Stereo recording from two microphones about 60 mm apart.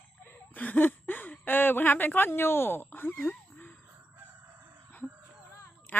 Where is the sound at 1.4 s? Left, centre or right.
Left.